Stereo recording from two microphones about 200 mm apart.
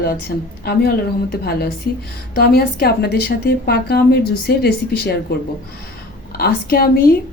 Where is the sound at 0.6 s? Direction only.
50° left (ahead or behind).